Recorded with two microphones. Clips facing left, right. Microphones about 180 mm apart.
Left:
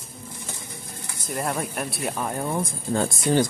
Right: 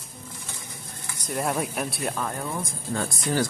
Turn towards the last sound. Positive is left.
turn(degrees=25)  # may be behind; listen again after turning